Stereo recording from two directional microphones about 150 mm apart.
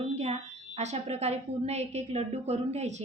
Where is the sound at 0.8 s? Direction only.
45° right (ahead or behind).